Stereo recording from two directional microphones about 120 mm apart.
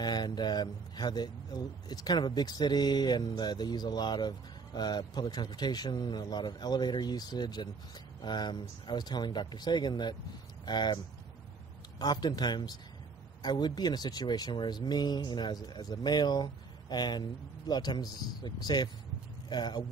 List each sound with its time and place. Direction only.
0.0 s speech: 35° left (ahead or behind)
12.0 s speech: 35° left (ahead or behind)